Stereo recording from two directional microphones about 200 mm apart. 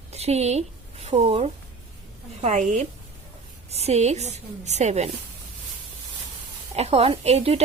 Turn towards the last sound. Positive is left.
turn(degrees=-30)  # may be behind; listen again after turning